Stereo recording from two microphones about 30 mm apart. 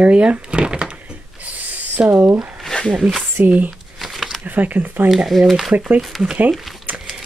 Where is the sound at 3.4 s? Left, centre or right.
Right.